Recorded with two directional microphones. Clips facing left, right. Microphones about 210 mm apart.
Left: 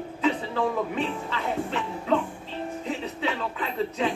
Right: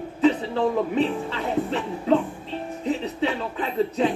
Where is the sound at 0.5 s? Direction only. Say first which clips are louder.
Right 5 dB; 35° right (ahead or behind).